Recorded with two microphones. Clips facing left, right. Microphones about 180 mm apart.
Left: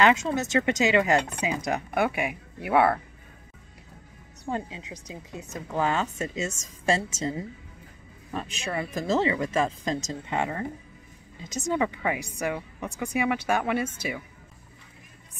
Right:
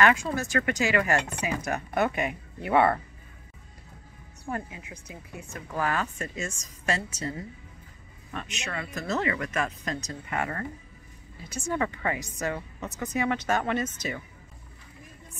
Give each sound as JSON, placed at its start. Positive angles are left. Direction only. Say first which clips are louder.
{"t": 0.0, "sound": "a woman's voice", "louder": "left 2 dB", "side_deg": 20}
{"t": 4.5, "sound": "a woman's voice", "louder": "left 3 dB", "side_deg": 20}